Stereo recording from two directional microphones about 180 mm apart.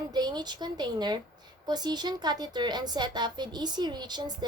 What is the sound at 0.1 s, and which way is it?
A woman's voice, 25° right (ahead or behind).